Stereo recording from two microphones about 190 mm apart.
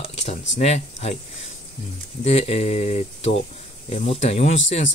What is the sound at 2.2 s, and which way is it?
Speech, 35° left (ahead or behind).